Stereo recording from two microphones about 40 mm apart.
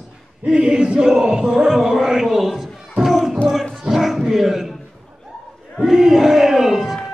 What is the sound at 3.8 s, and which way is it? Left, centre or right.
Dog, centre.